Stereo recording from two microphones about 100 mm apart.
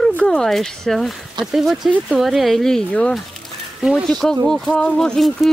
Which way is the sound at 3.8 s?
5° right (ahead or behind).